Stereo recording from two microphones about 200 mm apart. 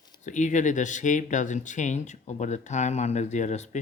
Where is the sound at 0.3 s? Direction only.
40° left (ahead or behind).